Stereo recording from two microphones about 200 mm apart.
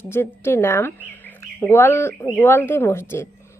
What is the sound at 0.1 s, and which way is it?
Speech, 10° left (ahead or behind).